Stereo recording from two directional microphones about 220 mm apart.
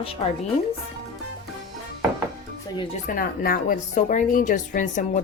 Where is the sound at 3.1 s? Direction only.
40° left (ahead or behind).